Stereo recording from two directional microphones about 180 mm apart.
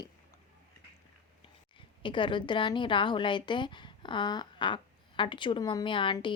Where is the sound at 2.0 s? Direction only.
25° left (ahead or behind).